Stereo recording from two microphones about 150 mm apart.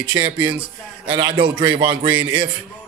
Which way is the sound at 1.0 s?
35° right (ahead or behind).